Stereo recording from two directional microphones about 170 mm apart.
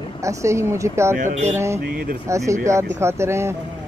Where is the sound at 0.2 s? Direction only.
15° right (ahead or behind).